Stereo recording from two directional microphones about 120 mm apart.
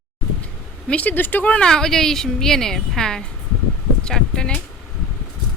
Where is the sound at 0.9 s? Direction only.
15° left (ahead or behind).